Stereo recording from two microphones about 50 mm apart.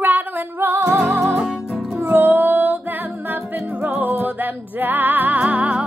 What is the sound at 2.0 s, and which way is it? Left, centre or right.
Music, right.